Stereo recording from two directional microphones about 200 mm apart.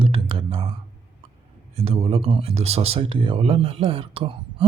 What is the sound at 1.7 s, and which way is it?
Speech, 30° right (ahead or behind).